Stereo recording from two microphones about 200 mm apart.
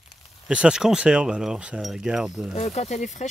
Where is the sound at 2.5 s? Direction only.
35° left (ahead or behind).